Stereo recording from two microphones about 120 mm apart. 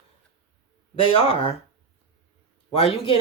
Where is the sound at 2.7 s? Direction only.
50° left (ahead or behind).